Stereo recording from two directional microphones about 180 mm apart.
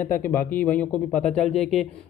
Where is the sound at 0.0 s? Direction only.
10° left (ahead or behind).